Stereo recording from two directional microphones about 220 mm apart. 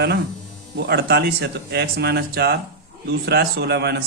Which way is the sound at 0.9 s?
45° right (ahead or behind).